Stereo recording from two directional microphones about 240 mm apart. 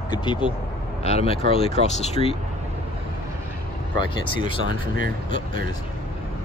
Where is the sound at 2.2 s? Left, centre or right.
Right.